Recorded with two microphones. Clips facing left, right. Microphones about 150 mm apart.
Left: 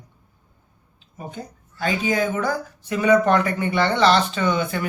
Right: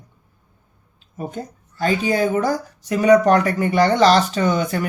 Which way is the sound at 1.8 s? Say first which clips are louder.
Right 3 dB; 35° right (ahead or behind).